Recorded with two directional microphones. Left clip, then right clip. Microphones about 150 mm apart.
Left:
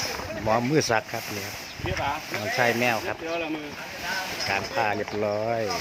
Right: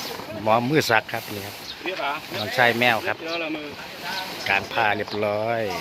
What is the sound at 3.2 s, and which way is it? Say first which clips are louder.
Speech: right 2 dB; 75° left (ahead or behind).